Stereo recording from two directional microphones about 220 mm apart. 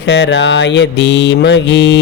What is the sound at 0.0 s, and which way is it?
Mantra, 50° left (ahead or behind).